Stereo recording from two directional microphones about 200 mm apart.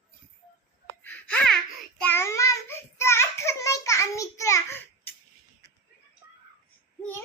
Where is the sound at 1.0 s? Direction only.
10° left (ahead or behind).